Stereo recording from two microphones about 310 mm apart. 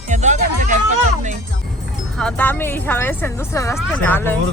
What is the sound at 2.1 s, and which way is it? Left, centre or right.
Speech, centre.